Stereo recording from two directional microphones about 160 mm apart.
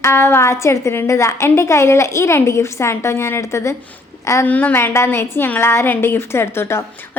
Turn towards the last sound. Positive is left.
turn(degrees=15)  # may be behind; listen again after turning